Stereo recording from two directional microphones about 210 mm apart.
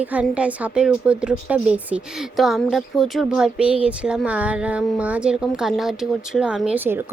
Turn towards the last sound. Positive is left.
turn(degrees=-10)  # may be behind; listen again after turning